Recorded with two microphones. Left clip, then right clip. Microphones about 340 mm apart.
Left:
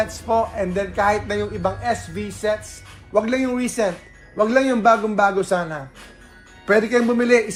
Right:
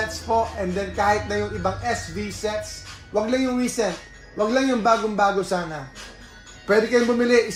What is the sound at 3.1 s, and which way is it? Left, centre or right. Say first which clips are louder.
Speech: left 3 dB; left.